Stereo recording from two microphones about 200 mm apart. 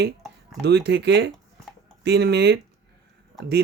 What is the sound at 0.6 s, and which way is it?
Speech, 55° right (ahead or behind).